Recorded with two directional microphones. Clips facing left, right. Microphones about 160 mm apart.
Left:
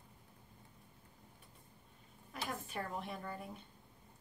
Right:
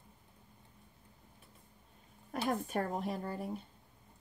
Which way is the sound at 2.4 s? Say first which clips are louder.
Right 9 dB; 45° right (ahead or behind).